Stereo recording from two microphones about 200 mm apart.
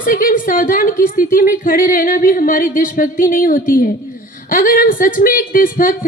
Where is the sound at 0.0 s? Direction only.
45° left (ahead or behind).